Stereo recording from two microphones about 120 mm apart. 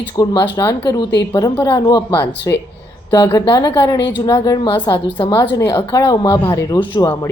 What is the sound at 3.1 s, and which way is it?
Speech, 35° left (ahead or behind).